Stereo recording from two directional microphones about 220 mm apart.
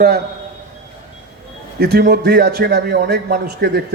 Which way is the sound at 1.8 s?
45° right (ahead or behind).